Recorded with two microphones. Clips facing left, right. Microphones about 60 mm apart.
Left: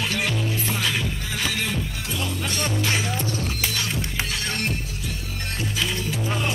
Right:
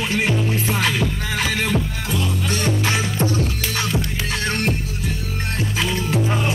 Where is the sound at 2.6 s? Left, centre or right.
Right.